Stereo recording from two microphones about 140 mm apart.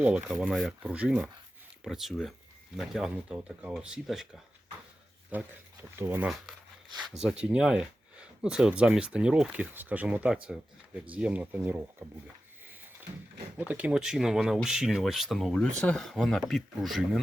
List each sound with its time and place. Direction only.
0.3 s speech: centre (ahead or behind)
5.3 s speech: 10° right (ahead or behind)
13.6 s speech: 10° right (ahead or behind)